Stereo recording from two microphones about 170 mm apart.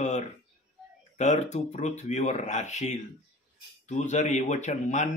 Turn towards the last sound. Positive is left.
turn(degrees=45)  # may be behind; listen again after turning